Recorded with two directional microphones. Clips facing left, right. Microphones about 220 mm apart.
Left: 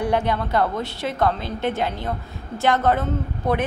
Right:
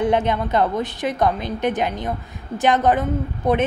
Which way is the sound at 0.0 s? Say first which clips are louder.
Right 3 dB; 20° right (ahead or behind).